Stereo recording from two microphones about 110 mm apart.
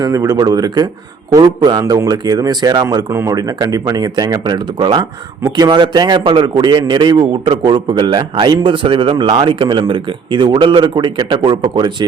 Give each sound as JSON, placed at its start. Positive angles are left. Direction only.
{"t": 0.0, "sound": "speech", "side_deg": -35}
{"t": 3.1, "sound": "speech", "side_deg": -30}